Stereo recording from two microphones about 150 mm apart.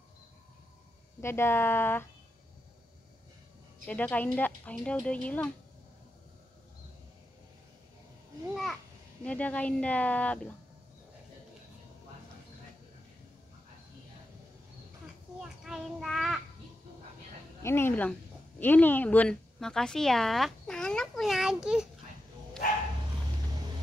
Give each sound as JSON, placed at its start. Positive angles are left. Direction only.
{"t": 1.2, "sound": "speech", "side_deg": 15}
{"t": 3.8, "sound": "speech", "side_deg": 10}
{"t": 9.2, "sound": "speech", "side_deg": 10}
{"t": 15.4, "sound": "child singing", "side_deg": -5}
{"t": 17.6, "sound": "a woman's voice", "side_deg": 15}